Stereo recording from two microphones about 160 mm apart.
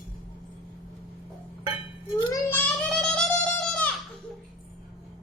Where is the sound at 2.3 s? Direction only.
10° left (ahead or behind).